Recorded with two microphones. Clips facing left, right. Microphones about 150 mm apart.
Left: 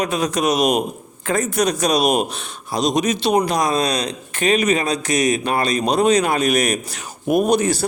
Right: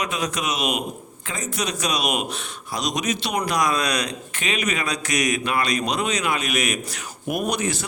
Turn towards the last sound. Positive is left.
turn(degrees=35)  # may be behind; listen again after turning